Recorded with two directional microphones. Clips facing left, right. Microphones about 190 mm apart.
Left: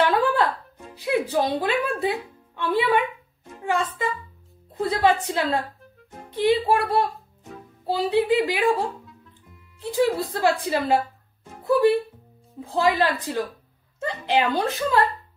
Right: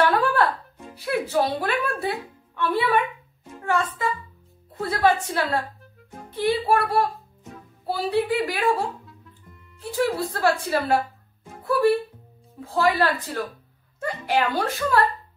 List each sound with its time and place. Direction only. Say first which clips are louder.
0.0 s music: even; 15° left (ahead or behind)
4.7 s a sound: left 1 dB; 15° left (ahead or behind)
6.3 s a woman's voice: left 2 dB; 15° left (ahead or behind)
9.0 s music: even; centre (ahead or behind)
9.9 s a woman's voice: left 2 dB; 20° left (ahead or behind)